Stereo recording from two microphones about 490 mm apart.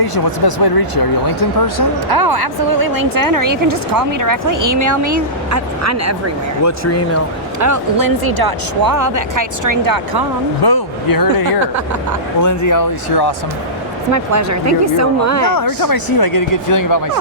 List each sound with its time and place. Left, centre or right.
0.0 s speech: left
2.0 s a woman's voice: right
7.6 s a woman's voice: right
10.6 s speech: left
14.1 s a woman's voice: right
15.5 s speech: left